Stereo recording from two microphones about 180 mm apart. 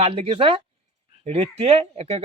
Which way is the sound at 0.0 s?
30° right (ahead or behind).